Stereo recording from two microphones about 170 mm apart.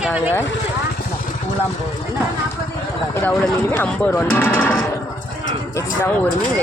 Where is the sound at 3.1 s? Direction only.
15° left (ahead or behind).